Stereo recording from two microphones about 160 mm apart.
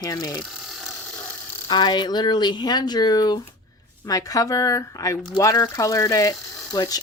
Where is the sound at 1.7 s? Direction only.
25° left (ahead or behind).